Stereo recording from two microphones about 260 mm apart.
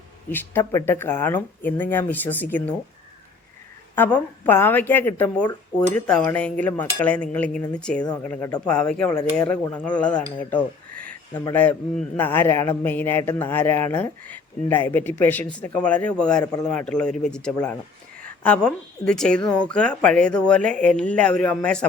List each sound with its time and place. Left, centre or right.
0.3 s a man's voice: centre
3.9 s a man's voice: centre
10.9 s a sound: right
11.3 s a man's voice: centre